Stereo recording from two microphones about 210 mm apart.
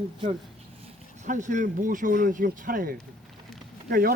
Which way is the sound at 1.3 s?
35° right (ahead or behind).